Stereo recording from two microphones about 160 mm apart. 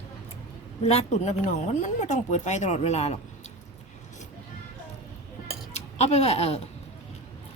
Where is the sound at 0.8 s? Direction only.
40° left (ahead or behind).